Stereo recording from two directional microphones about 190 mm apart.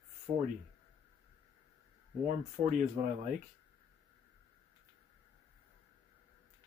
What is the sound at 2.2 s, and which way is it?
Speech, 40° right (ahead or behind).